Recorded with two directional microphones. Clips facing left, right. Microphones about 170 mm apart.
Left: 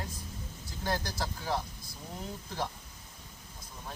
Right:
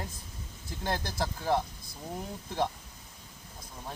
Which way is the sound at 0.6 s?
25° right (ahead or behind).